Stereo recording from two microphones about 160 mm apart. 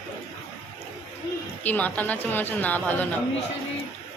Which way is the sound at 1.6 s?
10° left (ahead or behind).